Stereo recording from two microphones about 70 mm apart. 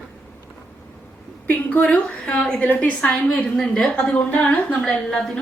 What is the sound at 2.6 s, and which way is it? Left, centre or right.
Speech, left.